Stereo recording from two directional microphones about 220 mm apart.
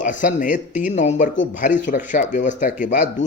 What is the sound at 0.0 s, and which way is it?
A man's voice, 35° left (ahead or behind).